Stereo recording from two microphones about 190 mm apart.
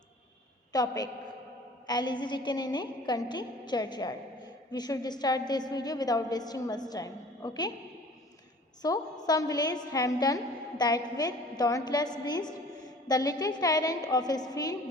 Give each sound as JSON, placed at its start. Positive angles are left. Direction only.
{"t": 0.7, "sound": "a woman's voice", "side_deg": 20}
{"t": 8.8, "sound": "a woman's voice", "side_deg": 20}